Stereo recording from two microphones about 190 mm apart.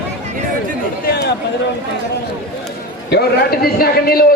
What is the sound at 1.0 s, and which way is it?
Chatter, 55° left (ahead or behind).